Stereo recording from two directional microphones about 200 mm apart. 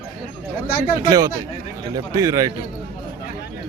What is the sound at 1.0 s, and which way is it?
A man's voice, 15° right (ahead or behind).